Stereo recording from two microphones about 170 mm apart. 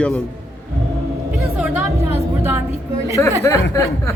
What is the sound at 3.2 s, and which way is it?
Speech, 15° left (ahead or behind).